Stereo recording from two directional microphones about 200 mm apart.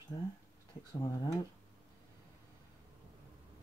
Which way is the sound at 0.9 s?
20° left (ahead or behind).